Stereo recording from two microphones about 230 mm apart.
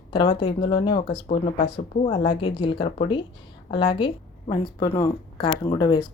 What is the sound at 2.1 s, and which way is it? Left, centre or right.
Speech, left.